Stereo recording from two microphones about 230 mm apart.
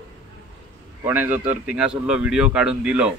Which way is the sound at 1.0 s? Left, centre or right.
Centre.